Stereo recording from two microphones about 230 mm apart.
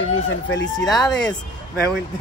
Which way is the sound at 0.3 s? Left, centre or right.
Left.